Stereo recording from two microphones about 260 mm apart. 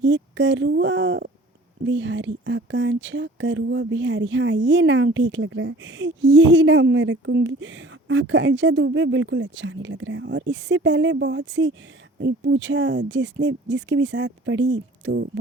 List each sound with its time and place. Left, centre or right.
0.0 s speech: right